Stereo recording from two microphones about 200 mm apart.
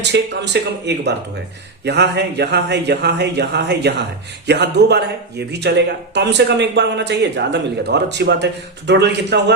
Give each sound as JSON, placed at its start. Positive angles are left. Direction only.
{"t": 0.0, "sound": "speech", "side_deg": -60}